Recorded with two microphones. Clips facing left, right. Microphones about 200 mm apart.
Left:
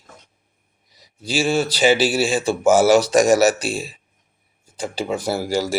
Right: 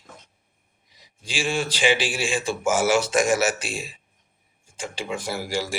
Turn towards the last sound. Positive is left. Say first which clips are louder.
# left 7 dB
turn(degrees=35)  # may be behind; listen again after turning